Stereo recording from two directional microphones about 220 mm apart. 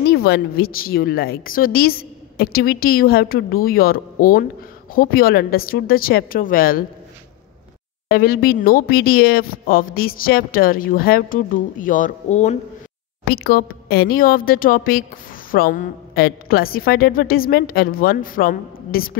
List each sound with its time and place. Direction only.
0.1 s a woman's voice: 45° left (ahead or behind)
8.1 s speech: 40° left (ahead or behind)
13.3 s speech: 45° left (ahead or behind)